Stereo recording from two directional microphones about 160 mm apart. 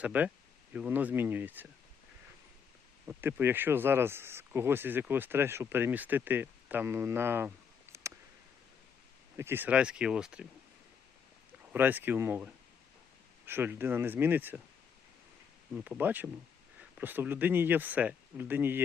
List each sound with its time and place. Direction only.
0.0 s speech: 10° right (ahead or behind)
3.1 s speech: 10° right (ahead or behind)
7.9 s a sound: 15° right (ahead or behind)
9.4 s speech: 15° right (ahead or behind)
11.7 s speech: 10° right (ahead or behind)
15.7 s speech: 10° right (ahead or behind)